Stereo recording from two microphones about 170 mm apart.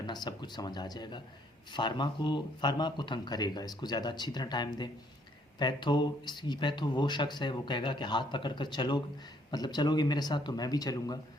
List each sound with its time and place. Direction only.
0.0 s speech: 25° left (ahead or behind)